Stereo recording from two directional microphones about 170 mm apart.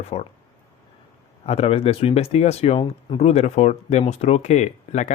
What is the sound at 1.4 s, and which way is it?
Speech, 35° left (ahead or behind).